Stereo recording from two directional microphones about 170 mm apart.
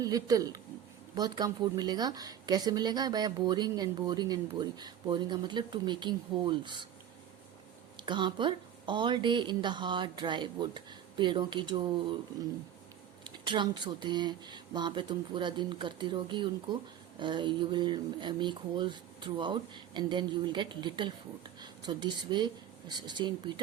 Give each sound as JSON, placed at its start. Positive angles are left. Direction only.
{"t": 0.0, "sound": "a woman's voice", "side_deg": -20}
{"t": 7.9, "sound": "a woman's voice", "side_deg": -25}
{"t": 13.2, "sound": "a woman's voice", "side_deg": -25}